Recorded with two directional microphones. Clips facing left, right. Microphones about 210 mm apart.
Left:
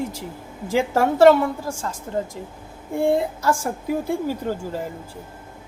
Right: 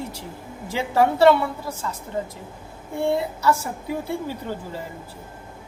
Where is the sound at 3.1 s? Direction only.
50° left (ahead or behind).